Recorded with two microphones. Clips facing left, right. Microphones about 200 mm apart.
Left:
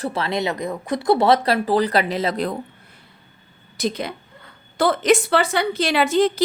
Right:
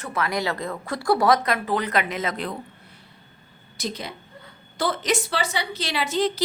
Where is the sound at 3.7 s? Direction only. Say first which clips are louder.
Left 7 dB; 55° left (ahead or behind).